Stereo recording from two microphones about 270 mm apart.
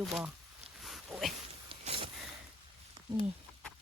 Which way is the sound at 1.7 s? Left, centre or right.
Centre.